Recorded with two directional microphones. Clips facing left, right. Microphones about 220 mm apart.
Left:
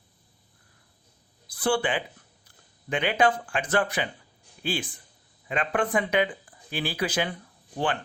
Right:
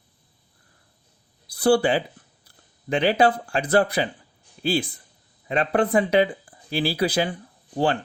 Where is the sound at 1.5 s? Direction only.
40° right (ahead or behind).